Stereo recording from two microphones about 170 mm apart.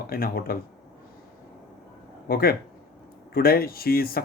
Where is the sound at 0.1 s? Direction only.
60° left (ahead or behind).